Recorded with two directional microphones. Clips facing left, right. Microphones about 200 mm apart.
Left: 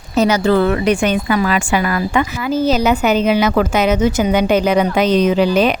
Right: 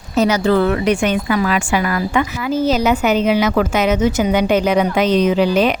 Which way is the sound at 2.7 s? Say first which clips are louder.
Left 1 dB; 35° left (ahead or behind).